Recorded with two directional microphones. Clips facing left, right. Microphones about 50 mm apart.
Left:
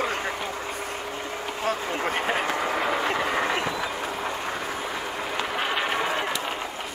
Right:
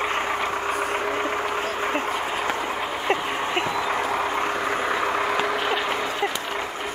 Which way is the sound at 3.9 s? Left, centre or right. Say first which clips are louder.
Right 6 dB; right.